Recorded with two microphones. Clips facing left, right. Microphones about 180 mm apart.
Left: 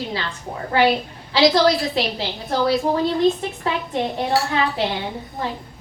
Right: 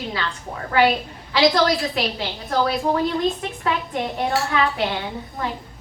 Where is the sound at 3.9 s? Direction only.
30° left (ahead or behind).